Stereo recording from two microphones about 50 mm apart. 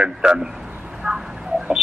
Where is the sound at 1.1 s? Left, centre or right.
Centre.